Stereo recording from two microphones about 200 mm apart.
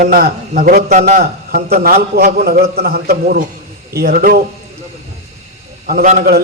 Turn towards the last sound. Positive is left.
turn(degrees=-45)  # may be behind; listen again after turning